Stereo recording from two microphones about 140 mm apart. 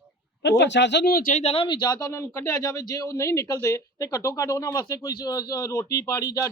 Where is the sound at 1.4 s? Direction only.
40° left (ahead or behind).